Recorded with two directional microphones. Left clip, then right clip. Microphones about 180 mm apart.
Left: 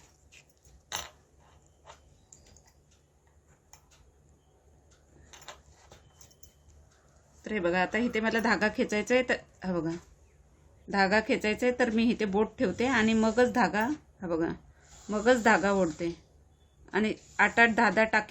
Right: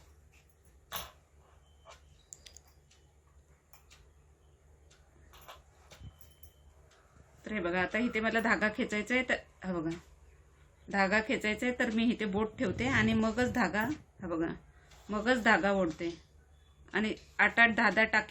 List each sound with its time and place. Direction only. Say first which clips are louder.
7.4 s speech: left 5 dB; 65° left (ahead or behind)
10.9 s speech: left 4 dB; 60° left (ahead or behind)